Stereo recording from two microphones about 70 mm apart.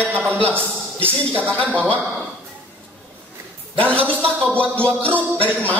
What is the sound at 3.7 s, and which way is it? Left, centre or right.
Speech, centre.